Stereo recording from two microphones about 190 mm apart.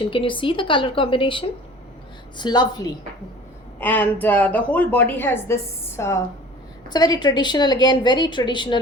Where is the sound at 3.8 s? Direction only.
10° left (ahead or behind).